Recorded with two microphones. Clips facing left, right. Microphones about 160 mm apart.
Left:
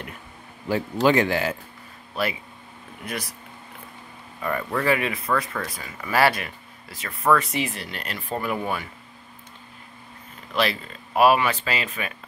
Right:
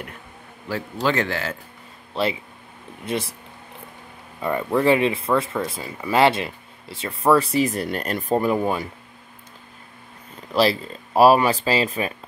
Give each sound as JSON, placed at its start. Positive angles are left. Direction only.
{"t": 0.7, "sound": "speech", "side_deg": 15}
{"t": 2.1, "sound": "speech", "side_deg": -25}
{"t": 4.4, "sound": "speech", "side_deg": -20}
{"t": 8.4, "sound": "speech", "side_deg": -30}
{"t": 10.5, "sound": "speech", "side_deg": -35}